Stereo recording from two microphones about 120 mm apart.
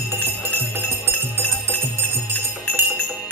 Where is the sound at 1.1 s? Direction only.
15° left (ahead or behind).